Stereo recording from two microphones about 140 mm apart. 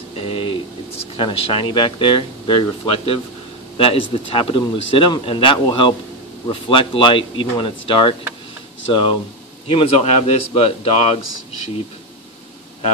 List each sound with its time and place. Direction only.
0.2 s speech: 40° left (ahead or behind)
9.7 s speech: 45° left (ahead or behind)